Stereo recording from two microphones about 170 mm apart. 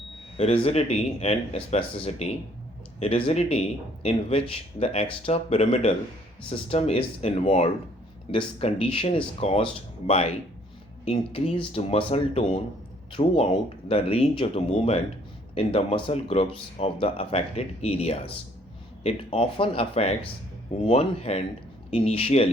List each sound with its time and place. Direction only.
0.3 s speech: 35° left (ahead or behind)